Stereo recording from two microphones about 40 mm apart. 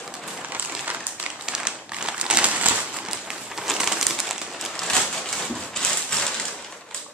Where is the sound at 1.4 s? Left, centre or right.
Right.